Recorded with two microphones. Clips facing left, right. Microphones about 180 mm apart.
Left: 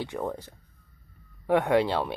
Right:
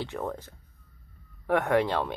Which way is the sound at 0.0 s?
10° left (ahead or behind).